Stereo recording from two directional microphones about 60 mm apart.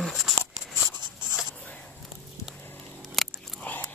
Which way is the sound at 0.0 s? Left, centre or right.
Centre.